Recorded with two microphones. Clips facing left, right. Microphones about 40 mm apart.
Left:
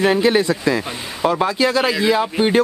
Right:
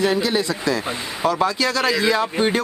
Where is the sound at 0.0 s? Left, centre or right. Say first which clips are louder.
Left 4 dB; left.